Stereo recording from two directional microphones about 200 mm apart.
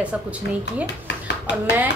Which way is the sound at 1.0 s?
60° left (ahead or behind).